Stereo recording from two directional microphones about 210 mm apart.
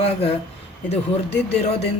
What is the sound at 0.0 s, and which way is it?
Speech, 30° left (ahead or behind).